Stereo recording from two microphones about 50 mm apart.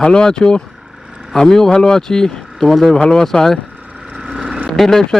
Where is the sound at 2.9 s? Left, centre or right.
Centre.